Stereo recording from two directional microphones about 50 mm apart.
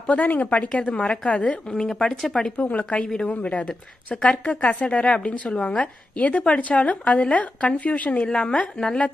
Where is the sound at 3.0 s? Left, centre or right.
Centre.